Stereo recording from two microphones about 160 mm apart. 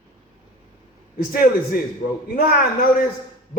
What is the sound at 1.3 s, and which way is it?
Speech, 65° left (ahead or behind).